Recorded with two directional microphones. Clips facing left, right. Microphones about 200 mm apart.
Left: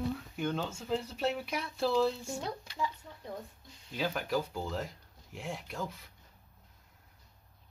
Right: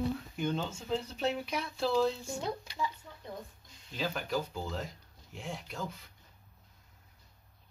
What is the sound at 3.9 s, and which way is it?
Speech, 5° left (ahead or behind).